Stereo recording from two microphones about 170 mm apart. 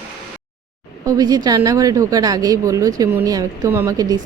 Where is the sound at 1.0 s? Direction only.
20° right (ahead or behind).